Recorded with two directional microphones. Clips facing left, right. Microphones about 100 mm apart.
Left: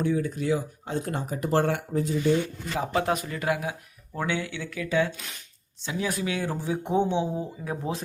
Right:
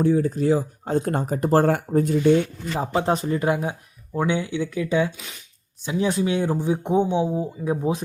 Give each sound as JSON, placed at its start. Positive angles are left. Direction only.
{"t": 0.0, "sound": "speech", "side_deg": -35}
{"t": 2.7, "sound": "speech", "side_deg": -30}
{"t": 5.1, "sound": "speech", "side_deg": 0}
{"t": 5.8, "sound": "speech", "side_deg": -20}